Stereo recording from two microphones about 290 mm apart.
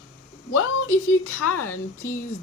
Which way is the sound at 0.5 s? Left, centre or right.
Left.